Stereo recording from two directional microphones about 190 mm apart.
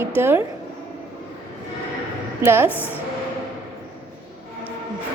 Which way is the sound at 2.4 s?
10° right (ahead or behind).